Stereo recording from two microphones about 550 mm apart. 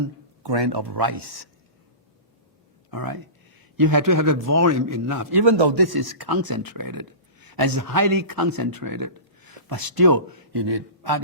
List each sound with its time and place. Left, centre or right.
0.4 s speech: right
2.9 s speech: right